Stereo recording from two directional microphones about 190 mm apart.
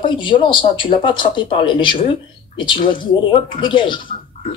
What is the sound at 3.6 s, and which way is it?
Speech, 25° left (ahead or behind).